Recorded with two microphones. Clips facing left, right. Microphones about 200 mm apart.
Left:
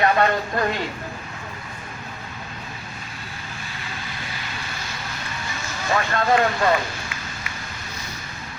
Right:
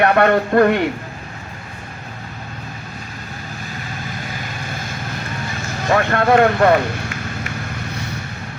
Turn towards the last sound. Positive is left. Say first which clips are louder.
# right 8 dB
turn(degrees=-55)  # may be behind; listen again after turning